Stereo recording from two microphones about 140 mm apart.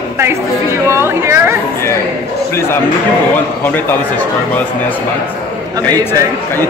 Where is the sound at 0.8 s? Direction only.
20° right (ahead or behind).